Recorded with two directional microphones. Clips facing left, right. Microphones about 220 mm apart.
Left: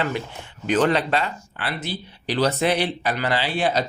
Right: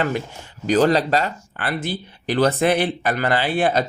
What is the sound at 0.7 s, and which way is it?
Speech, 35° right (ahead or behind).